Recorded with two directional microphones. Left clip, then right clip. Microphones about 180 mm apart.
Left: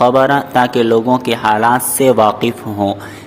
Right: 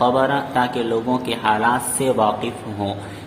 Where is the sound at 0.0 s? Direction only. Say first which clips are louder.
Left 7 dB; 35° left (ahead or behind).